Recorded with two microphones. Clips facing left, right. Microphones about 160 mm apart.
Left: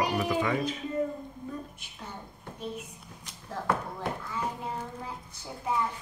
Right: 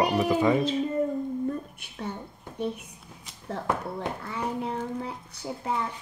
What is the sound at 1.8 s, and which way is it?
Speech, 60° right (ahead or behind).